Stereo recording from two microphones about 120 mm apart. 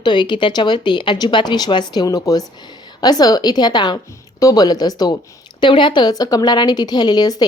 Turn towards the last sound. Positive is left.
turn(degrees=35)  # may be behind; listen again after turning